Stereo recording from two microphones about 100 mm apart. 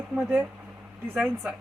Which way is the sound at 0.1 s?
15° right (ahead or behind).